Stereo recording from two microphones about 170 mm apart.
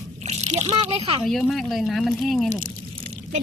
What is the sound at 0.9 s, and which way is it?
Speech, 30° right (ahead or behind).